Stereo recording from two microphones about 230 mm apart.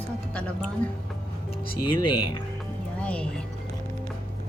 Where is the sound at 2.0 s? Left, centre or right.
Left.